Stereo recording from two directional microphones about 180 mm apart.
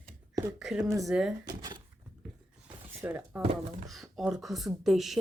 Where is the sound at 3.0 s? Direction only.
10° right (ahead or behind).